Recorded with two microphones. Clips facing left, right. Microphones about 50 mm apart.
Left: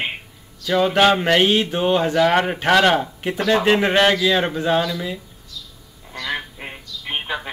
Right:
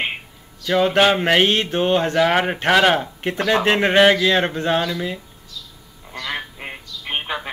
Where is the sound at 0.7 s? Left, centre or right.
Centre.